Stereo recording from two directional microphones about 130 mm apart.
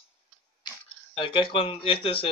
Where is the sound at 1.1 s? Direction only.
40° left (ahead or behind).